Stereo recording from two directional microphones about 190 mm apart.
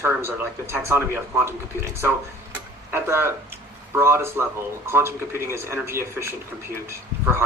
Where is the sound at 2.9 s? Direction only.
10° right (ahead or behind).